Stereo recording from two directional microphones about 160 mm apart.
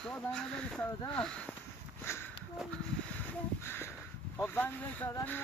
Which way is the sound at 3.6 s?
15° left (ahead or behind).